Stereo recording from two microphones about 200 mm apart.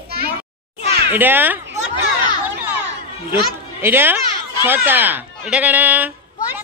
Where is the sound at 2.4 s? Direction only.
10° right (ahead or behind).